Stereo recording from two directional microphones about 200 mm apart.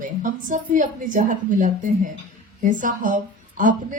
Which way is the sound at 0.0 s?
40° right (ahead or behind).